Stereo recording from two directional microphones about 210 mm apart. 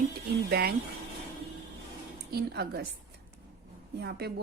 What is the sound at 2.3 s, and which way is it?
Speech, 50° right (ahead or behind).